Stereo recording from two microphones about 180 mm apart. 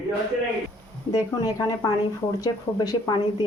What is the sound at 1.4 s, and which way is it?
A woman's voice, 20° left (ahead or behind).